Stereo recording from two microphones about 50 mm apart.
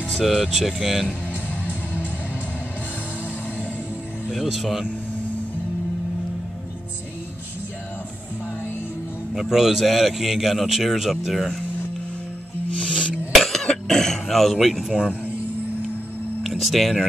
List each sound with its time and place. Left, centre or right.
0.2 s a man's voice: centre
4.3 s a man's voice: centre
9.3 s a man's voice: centre
12.7 s music: centre
13.3 s cough: centre
13.8 s speech: centre
16.4 s speech: centre